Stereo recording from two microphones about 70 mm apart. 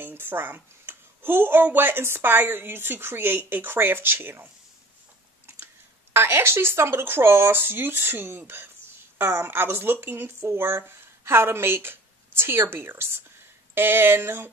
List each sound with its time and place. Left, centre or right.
0.0 s speech: right
6.1 s speech: right